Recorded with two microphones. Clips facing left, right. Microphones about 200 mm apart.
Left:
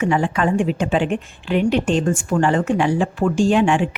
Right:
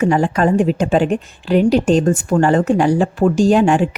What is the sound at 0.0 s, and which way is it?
A woman's voice, 40° right (ahead or behind).